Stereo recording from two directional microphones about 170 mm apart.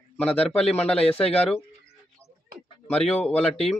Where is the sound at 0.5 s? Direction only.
5° left (ahead or behind).